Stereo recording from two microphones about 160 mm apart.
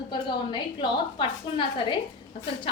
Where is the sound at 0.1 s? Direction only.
25° left (ahead or behind).